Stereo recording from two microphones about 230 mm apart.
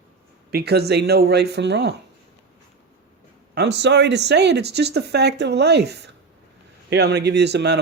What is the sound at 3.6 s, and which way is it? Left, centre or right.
Speech, right.